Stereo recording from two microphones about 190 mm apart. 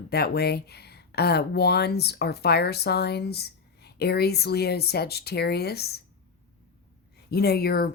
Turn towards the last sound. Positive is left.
turn(degrees=55)  # may be behind; listen again after turning